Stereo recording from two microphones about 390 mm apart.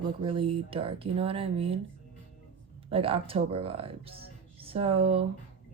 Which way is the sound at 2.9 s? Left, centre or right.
Centre.